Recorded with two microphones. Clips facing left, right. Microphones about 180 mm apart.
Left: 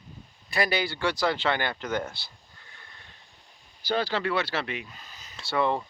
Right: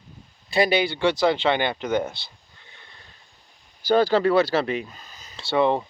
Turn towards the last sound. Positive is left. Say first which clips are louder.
# right 6 dB
turn(degrees=-25)  # may be behind; listen again after turning